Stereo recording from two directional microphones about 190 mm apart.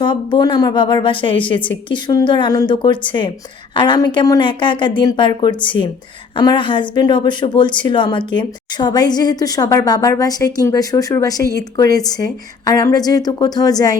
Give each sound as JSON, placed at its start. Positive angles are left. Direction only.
{"t": 0.0, "sound": "a woman's voice", "side_deg": 25}